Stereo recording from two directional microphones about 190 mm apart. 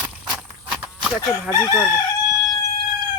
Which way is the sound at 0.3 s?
5° right (ahead or behind).